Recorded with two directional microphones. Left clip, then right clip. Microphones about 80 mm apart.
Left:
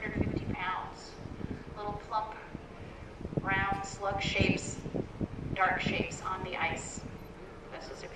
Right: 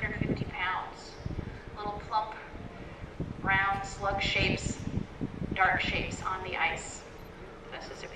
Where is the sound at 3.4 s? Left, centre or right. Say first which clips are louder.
Right 4 dB; right.